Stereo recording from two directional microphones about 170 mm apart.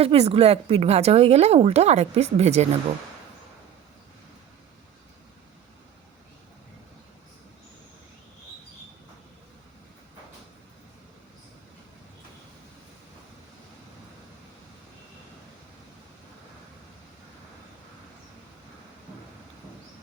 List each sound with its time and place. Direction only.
0.0 s a woman's voice: 35° right (ahead or behind)